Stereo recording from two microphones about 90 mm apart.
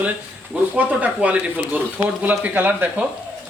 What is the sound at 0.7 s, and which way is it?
A man's voice, 15° right (ahead or behind).